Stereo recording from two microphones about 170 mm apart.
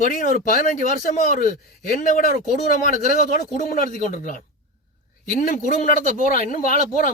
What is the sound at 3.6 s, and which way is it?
Speech, 50° left (ahead or behind).